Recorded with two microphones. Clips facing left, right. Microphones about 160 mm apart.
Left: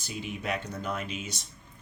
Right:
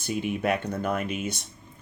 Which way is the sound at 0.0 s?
55° right (ahead or behind).